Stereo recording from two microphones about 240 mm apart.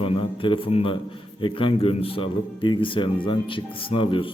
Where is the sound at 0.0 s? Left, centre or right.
Left.